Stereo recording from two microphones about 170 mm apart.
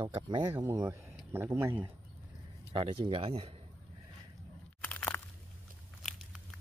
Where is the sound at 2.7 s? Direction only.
30° right (ahead or behind).